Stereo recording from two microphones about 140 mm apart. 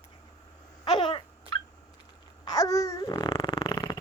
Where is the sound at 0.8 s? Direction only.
40° left (ahead or behind).